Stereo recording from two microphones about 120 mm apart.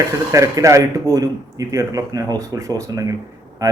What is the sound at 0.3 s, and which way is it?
Speech, 25° right (ahead or behind).